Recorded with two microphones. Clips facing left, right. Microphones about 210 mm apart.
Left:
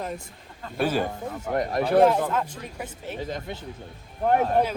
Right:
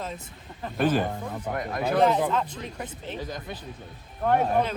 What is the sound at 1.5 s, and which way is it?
Speech, 30° left (ahead or behind).